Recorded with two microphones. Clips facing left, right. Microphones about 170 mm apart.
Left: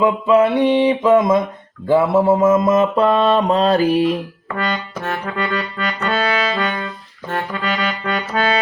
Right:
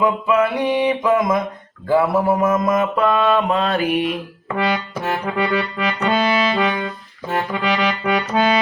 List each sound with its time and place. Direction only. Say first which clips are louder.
0.0 s music: left 3 dB; 25° left (ahead or behind)
1.9 s mantra: left 3 dB; 25° left (ahead or behind)
4.5 s accordion: right 2 dB; 10° right (ahead or behind)